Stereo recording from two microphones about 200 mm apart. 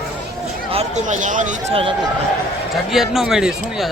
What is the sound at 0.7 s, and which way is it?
Speech, 35° right (ahead or behind).